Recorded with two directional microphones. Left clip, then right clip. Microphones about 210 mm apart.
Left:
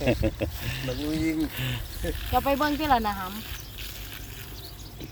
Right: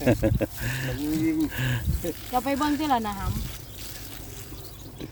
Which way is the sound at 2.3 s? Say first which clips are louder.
Left 1 dB; 5° right (ahead or behind).